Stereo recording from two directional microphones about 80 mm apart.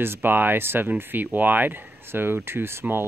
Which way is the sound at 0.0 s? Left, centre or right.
Right.